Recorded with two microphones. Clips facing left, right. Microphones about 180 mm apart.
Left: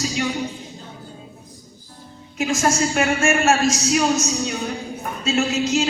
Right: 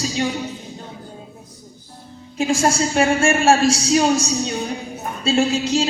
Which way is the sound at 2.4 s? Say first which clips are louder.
Right 2 dB; 30° right (ahead or behind).